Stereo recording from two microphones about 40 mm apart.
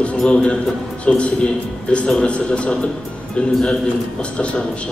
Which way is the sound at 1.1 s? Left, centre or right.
Left.